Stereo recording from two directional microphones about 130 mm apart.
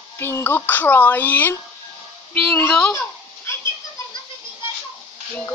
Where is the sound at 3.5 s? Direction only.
20° left (ahead or behind).